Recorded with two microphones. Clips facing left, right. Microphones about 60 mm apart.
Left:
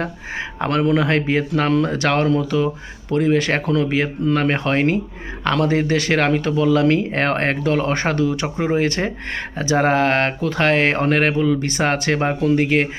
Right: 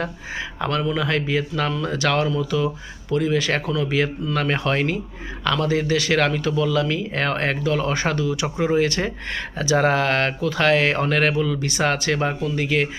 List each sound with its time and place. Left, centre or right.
0.0 s speech: left